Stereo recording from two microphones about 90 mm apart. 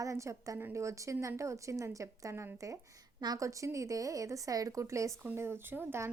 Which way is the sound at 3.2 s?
45° right (ahead or behind).